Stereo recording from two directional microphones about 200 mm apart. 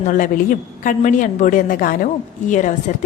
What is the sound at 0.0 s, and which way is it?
A woman's voice, 40° left (ahead or behind).